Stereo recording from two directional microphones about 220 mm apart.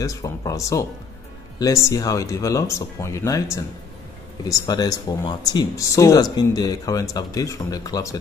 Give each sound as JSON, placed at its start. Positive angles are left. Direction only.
{"t": 0.0, "sound": "speech", "side_deg": 15}
{"t": 4.5, "sound": "speech", "side_deg": 15}